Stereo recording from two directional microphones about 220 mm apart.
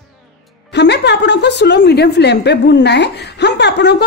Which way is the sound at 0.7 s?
50° left (ahead or behind).